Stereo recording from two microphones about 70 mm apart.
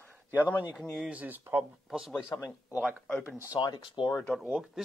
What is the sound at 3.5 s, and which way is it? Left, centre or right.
Speech, left.